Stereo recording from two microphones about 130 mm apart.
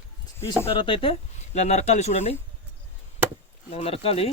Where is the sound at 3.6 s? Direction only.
50° left (ahead or behind).